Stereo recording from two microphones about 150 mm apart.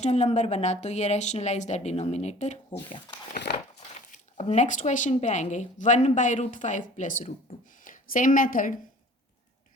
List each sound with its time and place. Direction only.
0.0 s speech: 50° left (ahead or behind)
3.8 s speech: 50° left (ahead or behind)
7.9 s a woman's voice: 65° left (ahead or behind)